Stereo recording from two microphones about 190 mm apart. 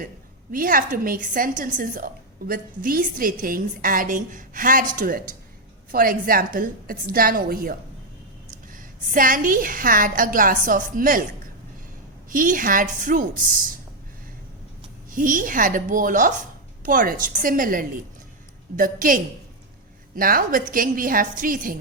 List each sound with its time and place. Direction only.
0.5 s a woman's voice: 45° right (ahead or behind)
12.3 s a woman's voice: 45° right (ahead or behind)
15.1 s a woman's voice: 45° right (ahead or behind)